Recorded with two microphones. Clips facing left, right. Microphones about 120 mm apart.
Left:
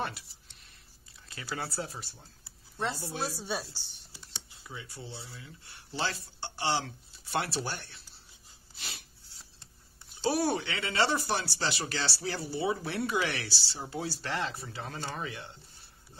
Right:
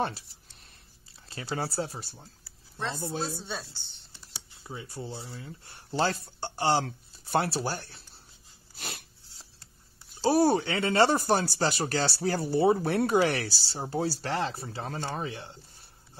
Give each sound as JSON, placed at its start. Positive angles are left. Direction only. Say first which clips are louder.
{"t": 1.3, "sound": "speech", "louder": "right 5 dB", "side_deg": -30}
{"t": 2.9, "sound": "a woman's voice", "louder": "right 3 dB", "side_deg": -25}
{"t": 3.3, "sound": "a woman's voice", "louder": "left 2 dB", "side_deg": 10}
{"t": 4.6, "sound": "speech", "louder": "right 6 dB", "side_deg": -35}
{"t": 8.7, "sound": "dog", "louder": "right 6 dB", "side_deg": -50}
{"t": 10.2, "sound": "speech", "louder": "right 6 dB", "side_deg": -40}